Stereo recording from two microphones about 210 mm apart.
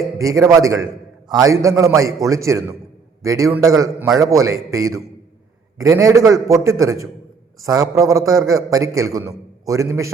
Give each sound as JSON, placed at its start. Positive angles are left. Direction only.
{"t": 0.2, "sound": "a man's voice", "side_deg": -15}